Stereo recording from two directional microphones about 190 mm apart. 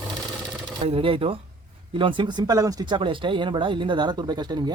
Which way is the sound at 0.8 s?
30° right (ahead or behind).